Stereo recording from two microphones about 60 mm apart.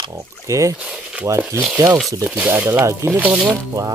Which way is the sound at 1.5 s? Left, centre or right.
Right.